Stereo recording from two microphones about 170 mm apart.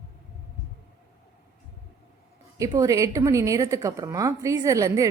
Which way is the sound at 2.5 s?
20° right (ahead or behind).